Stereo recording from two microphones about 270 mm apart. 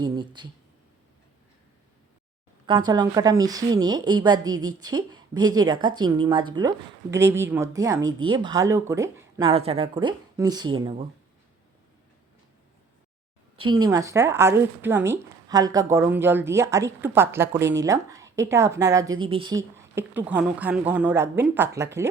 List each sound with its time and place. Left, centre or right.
0.0 s speech: centre
2.6 s speech: centre
13.6 s speech: centre